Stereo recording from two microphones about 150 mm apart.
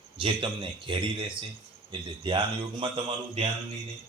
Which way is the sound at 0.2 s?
35° right (ahead or behind).